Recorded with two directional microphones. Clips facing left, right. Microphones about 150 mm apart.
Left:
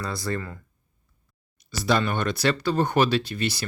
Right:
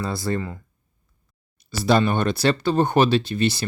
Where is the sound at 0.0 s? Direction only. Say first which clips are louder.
Right 4 dB; 25° right (ahead or behind).